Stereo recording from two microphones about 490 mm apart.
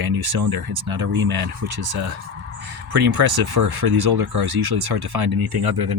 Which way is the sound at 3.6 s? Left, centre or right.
Right.